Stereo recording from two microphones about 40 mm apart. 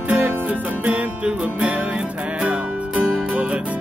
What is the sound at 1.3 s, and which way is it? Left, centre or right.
Music, right.